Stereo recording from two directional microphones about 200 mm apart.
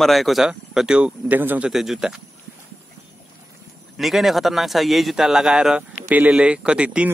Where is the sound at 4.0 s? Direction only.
Centre (ahead or behind).